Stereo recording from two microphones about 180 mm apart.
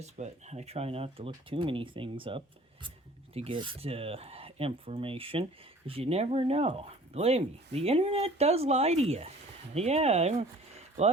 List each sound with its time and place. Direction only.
0.0 s speech: 40° right (ahead or behind)